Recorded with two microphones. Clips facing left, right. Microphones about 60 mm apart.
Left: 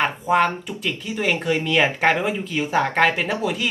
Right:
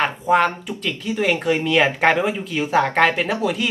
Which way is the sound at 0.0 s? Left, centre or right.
Centre.